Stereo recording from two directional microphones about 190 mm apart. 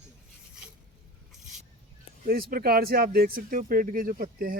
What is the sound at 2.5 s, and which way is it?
Speech, 50° right (ahead or behind).